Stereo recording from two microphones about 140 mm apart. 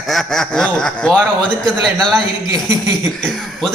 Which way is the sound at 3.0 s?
5° left (ahead or behind).